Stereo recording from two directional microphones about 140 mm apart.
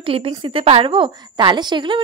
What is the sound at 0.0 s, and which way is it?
A woman's voice, 40° right (ahead or behind).